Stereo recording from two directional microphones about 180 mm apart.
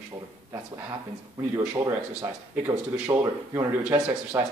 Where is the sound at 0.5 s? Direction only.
15° right (ahead or behind).